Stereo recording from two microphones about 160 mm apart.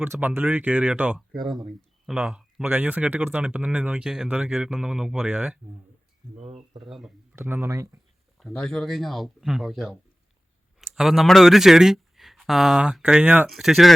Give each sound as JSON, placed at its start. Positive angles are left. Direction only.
{"t": 0.0, "sound": "speech", "side_deg": -10}
{"t": 7.3, "sound": "speech", "side_deg": -15}
{"t": 8.4, "sound": "speech", "side_deg": 0}